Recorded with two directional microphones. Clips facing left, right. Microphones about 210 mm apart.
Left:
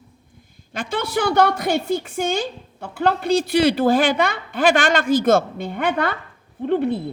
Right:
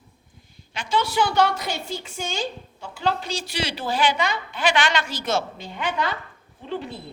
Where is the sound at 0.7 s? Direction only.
55° left (ahead or behind).